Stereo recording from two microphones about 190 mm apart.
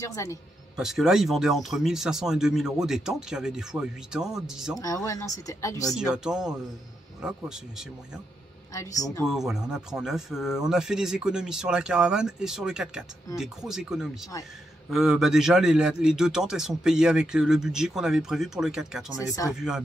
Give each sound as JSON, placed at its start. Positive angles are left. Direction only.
{"t": 0.0, "sound": "speech", "side_deg": 15}
{"t": 0.7, "sound": "speech", "side_deg": 0}
{"t": 4.7, "sound": "speech", "side_deg": 15}
{"t": 5.9, "sound": "speech", "side_deg": -5}
{"t": 8.7, "sound": "speech", "side_deg": 15}
{"t": 9.3, "sound": "speech", "side_deg": 0}
{"t": 19.1, "sound": "speech", "side_deg": 20}
{"t": 19.5, "sound": "speech", "side_deg": -5}